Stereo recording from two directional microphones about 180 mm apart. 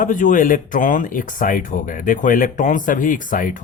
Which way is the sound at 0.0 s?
45° left (ahead or behind).